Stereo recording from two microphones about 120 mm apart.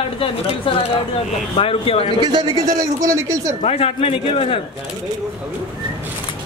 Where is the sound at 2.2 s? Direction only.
35° right (ahead or behind).